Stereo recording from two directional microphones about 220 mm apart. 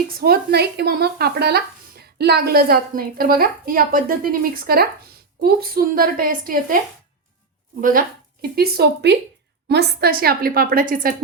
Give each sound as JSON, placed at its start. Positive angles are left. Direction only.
{"t": 0.2, "sound": "a woman's voice", "side_deg": -45}
{"t": 7.8, "sound": "a woman's voice", "side_deg": -40}